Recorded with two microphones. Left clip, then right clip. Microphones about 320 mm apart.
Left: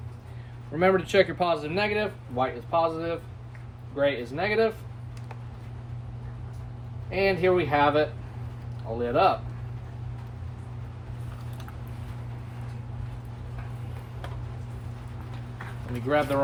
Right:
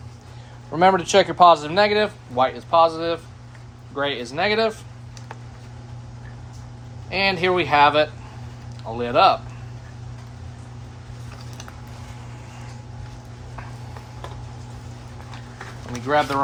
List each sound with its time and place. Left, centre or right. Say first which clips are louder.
0.8 s speech: right 6 dB; centre
7.1 s speech: right 3 dB; right